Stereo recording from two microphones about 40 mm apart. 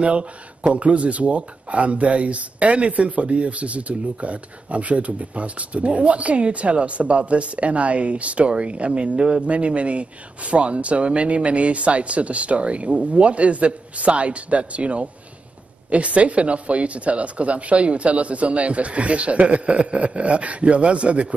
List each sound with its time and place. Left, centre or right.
0.0 s speech: right